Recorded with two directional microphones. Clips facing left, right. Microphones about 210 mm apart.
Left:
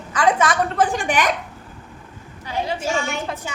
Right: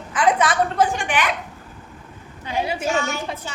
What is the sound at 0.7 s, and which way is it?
Speech, 45° left (ahead or behind).